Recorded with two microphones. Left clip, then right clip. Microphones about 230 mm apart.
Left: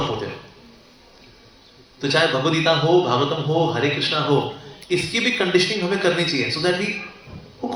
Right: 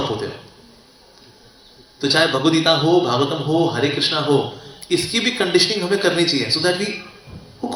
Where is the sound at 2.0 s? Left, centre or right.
Right.